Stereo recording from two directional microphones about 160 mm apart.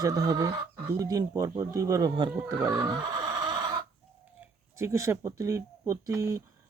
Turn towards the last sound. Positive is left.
turn(degrees=-20)  # may be behind; listen again after turning